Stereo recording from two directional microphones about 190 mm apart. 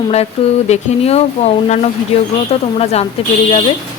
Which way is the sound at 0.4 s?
30° left (ahead or behind).